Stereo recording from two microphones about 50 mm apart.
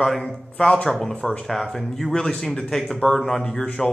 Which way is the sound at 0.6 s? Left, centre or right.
Left.